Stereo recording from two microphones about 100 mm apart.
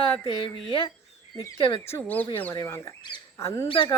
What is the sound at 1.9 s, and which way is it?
Speech, 15° left (ahead or behind).